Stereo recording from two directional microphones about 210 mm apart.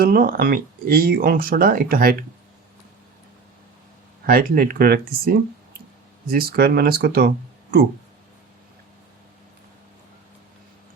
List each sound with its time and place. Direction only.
0.0 s speech: 45° right (ahead or behind)
4.3 s speech: 45° right (ahead or behind)